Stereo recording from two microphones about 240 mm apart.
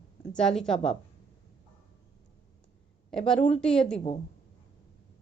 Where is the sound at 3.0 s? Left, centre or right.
Centre.